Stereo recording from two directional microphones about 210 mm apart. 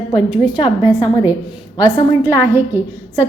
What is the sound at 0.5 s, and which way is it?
Speech, 20° left (ahead or behind).